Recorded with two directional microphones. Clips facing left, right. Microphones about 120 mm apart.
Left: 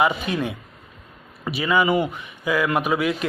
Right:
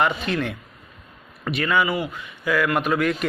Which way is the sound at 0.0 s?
15° left (ahead or behind).